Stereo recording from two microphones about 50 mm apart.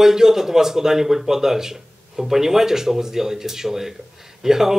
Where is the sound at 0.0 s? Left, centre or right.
Centre.